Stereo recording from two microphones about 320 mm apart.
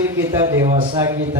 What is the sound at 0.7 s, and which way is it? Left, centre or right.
Speech, centre.